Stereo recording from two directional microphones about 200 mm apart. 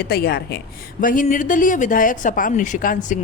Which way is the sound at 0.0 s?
50° left (ahead or behind).